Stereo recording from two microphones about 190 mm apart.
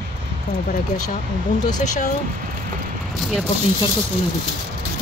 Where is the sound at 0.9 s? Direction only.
40° left (ahead or behind).